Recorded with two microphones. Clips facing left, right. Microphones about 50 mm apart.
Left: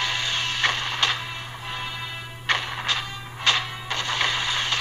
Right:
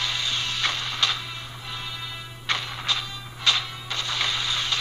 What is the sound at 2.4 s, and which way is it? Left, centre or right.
Music, left.